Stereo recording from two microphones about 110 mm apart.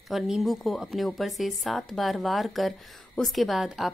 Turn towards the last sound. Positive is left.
turn(degrees=0)  # may be behind; listen again after turning